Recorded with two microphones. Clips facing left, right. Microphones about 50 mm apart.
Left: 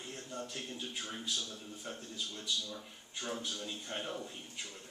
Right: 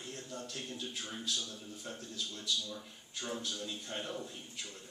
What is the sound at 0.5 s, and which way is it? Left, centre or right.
A man's voice, centre.